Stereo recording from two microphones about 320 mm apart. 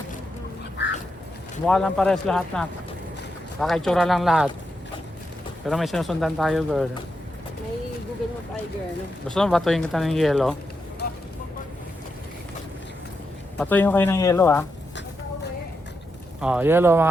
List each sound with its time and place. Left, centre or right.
1.6 s speech: centre
5.6 s speech: centre
9.2 s speech: centre
13.6 s speech: centre
16.4 s speech: centre